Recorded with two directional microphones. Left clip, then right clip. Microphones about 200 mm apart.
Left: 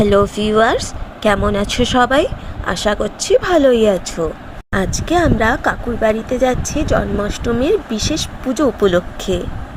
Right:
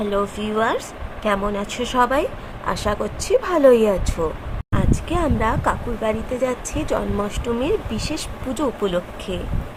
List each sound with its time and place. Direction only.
0.0 s a woman's voice: 30° left (ahead or behind); by 4.1 s 10° left (ahead or behind)
5.1 s a woman's voice: 15° left (ahead or behind)
8.6 s speech: 25° left (ahead or behind)